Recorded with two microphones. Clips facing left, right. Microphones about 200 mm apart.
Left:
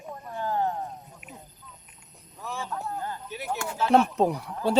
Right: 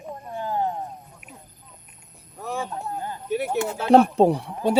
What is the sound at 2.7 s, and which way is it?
Speech, 20° right (ahead or behind).